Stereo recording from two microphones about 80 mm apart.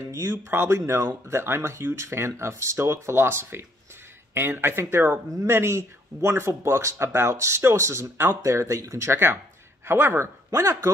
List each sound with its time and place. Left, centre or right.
0.3 s speech: right